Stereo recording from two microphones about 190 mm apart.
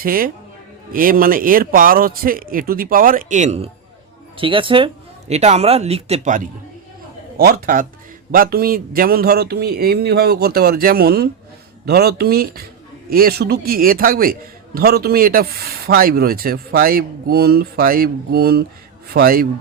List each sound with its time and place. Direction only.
0.0 s speech: 50° right (ahead or behind)